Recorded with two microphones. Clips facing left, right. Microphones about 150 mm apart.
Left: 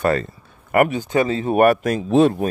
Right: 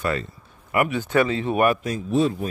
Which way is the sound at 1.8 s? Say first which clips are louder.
Left 6 dB; 85° left.